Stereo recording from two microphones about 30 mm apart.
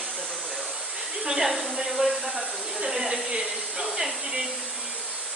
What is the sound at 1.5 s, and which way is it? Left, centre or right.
Speech, centre.